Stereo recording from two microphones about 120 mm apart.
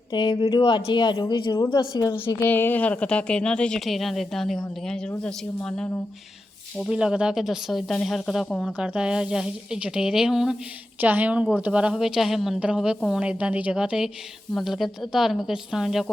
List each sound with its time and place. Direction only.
0.1 s speech: 40° left (ahead or behind)
2.4 s speech: 15° left (ahead or behind)
6.7 s speech: 5° right (ahead or behind)
11.0 s a woman's voice: 15° right (ahead or behind)